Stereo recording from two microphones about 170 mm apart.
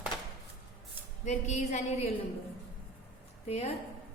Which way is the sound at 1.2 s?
45° left (ahead or behind).